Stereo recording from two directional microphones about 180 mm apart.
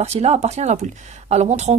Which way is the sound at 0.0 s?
35° right (ahead or behind).